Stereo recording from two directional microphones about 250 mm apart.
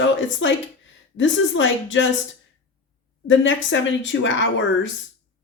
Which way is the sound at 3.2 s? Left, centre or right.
Left.